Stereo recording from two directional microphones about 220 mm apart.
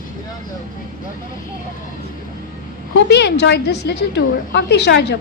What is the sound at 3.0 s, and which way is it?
A woman's voice, 50° left (ahead or behind).